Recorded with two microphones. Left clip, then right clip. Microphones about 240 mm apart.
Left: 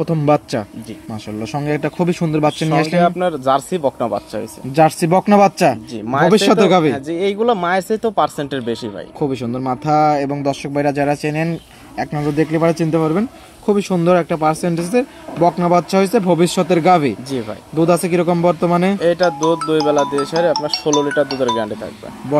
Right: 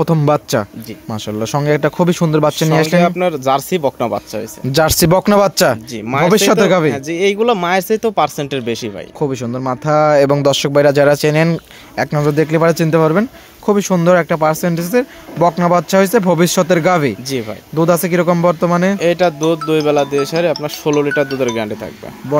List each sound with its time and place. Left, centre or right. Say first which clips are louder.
0.0 s speech: right 2 dB; right
7.1 s speech: right 3 dB; right
18.9 s speech: right 1 dB; right
22.3 s speech: right 1 dB; centre